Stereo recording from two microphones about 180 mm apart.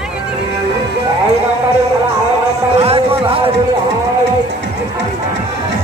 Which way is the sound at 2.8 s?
30° right (ahead or behind).